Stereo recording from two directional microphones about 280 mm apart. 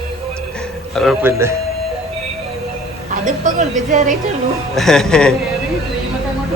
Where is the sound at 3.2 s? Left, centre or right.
Right.